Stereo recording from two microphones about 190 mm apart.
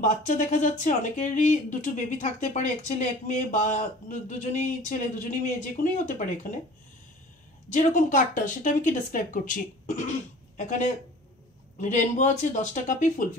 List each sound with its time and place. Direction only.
0.0 s speech: 40° left (ahead or behind)
7.7 s speech: 40° left (ahead or behind)
11.8 s speech: 40° left (ahead or behind)